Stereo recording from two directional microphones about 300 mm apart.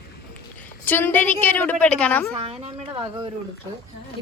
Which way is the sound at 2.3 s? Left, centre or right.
Centre.